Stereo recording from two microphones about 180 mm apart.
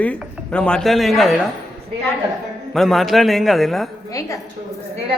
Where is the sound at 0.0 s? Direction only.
5° left (ahead or behind).